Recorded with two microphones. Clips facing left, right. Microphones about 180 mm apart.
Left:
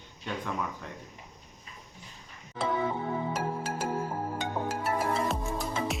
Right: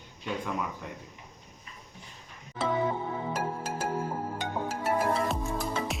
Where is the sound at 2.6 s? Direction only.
Centre (ahead or behind).